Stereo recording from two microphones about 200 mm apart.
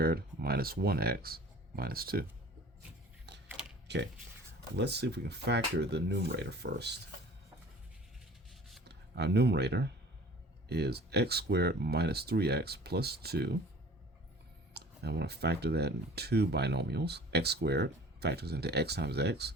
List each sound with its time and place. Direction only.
0.0 s speech: 50° right (ahead or behind)
3.3 s mechanisms: 60° right (ahead or behind)
3.9 s speech: 55° right (ahead or behind)
8.8 s speech: 55° right (ahead or behind)
14.7 s speech: 55° right (ahead or behind)